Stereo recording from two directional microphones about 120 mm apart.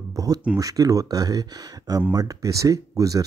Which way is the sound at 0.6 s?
30° right (ahead or behind).